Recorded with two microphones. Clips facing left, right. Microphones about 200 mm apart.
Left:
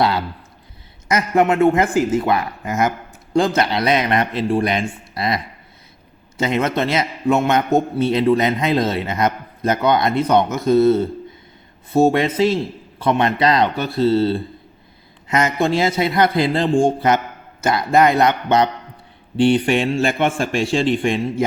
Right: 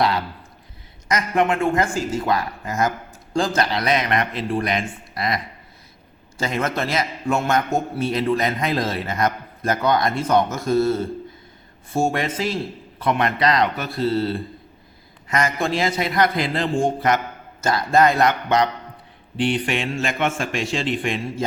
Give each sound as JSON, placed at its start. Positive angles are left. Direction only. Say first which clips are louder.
{"t": 1.0, "sound": "a man's voice", "louder": "left 4 dB", "side_deg": 25}
{"t": 12.0, "sound": "a man's voice", "louder": "left 7 dB", "side_deg": 20}
{"t": 17.6, "sound": "a man's voice", "louder": "left 2 dB", "side_deg": 20}